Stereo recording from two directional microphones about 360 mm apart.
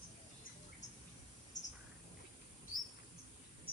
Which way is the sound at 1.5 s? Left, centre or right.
Centre.